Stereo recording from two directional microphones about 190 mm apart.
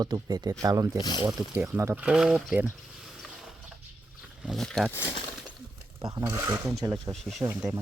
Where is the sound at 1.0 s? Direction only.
20° left (ahead or behind).